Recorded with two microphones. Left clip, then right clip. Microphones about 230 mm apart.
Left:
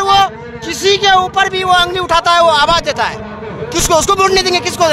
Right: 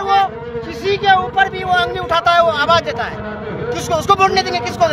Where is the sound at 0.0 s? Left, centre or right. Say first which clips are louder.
Left 4 dB; left.